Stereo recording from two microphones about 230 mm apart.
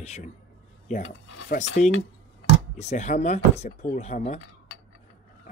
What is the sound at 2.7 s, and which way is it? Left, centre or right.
Speech, left.